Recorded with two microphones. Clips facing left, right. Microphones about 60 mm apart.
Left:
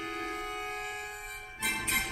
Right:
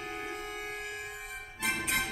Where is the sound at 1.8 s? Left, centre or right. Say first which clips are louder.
Even; centre.